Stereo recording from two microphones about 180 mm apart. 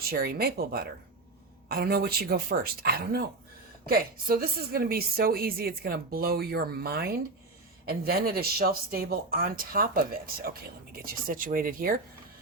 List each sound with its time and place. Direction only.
0.1 s speech: 60° right (ahead or behind)